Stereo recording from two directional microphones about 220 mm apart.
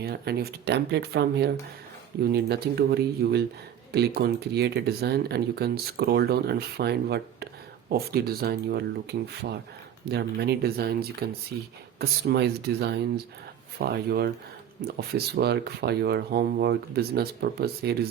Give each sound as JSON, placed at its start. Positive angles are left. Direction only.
{"t": 0.0, "sound": "speech", "side_deg": -45}